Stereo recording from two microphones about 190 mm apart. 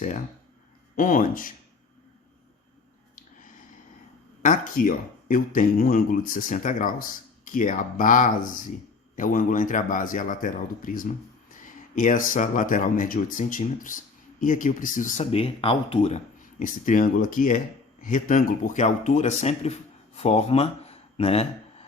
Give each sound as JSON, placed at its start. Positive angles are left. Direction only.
{"t": 0.9, "sound": "speech", "side_deg": 45}
{"t": 4.4, "sound": "speech", "side_deg": 45}